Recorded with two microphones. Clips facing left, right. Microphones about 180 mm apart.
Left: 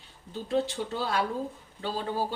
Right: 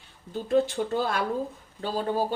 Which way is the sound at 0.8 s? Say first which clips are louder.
Right 3 dB; 50° right (ahead or behind).